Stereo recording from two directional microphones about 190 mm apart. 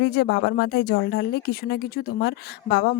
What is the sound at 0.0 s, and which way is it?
A woman's voice, 55° left (ahead or behind).